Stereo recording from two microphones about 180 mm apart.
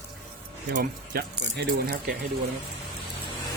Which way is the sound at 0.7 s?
55° right (ahead or behind).